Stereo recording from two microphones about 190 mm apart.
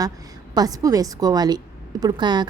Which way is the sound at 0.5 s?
20° right (ahead or behind).